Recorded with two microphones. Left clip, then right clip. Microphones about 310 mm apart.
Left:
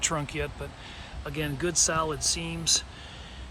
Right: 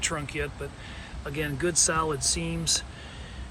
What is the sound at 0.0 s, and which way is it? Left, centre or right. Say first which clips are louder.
Speech: even; centre.